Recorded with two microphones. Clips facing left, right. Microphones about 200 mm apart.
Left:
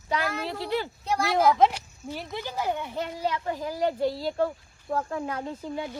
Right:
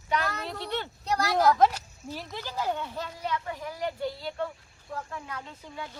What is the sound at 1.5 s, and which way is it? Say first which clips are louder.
Speech: left 1 dB; 20° left (ahead or behind).